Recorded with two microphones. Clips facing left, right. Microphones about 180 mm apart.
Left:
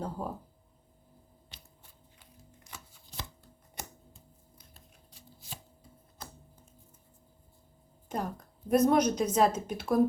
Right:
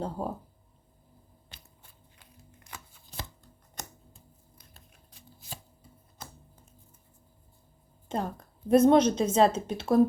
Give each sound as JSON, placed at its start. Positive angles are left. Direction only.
{"t": 0.2, "sound": "a woman's voice", "side_deg": -25}
{"t": 2.7, "sound": "shuffling cards", "side_deg": -55}
{"t": 8.1, "sound": "a sound", "side_deg": -25}
{"t": 8.7, "sound": "a woman's voice", "side_deg": -25}